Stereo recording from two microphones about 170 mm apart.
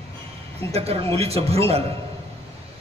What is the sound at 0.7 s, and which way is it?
A man's voice, 35° right (ahead or behind).